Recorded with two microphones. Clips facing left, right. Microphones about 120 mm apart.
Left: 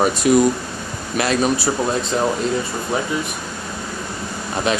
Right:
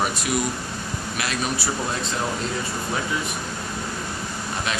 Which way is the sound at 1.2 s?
35° left (ahead or behind).